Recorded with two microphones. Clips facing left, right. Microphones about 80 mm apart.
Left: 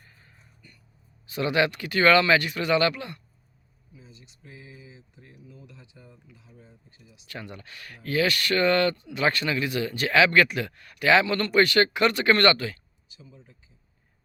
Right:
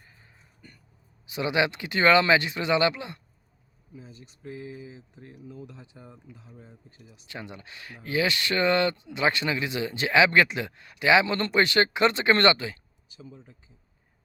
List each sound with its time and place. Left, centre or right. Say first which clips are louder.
0.0 s music: even; centre
1.3 s speech: left 1 dB; centre
3.9 s speech: right 5 dB; right
7.3 s speech: even; centre
13.1 s speech: right 5 dB; right